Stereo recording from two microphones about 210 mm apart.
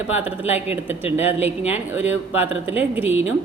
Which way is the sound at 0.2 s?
10° right (ahead or behind).